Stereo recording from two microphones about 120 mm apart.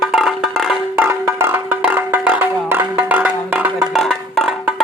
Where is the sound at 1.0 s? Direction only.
20° right (ahead or behind).